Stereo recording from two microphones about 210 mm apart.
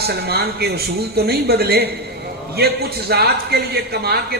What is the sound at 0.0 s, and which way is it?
Speech, 50° right (ahead or behind).